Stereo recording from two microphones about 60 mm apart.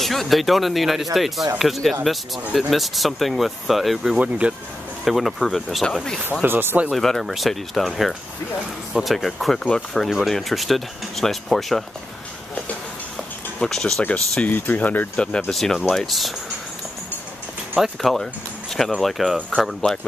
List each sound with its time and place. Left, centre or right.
0.0 s speech: centre
4.2 s speech: right
5.0 s speech: centre
6.4 s speech: right
6.9 s speech: centre
13.6 s speech: centre
14.4 s speech: left
15.1 s speech: centre
18.0 s speech: centre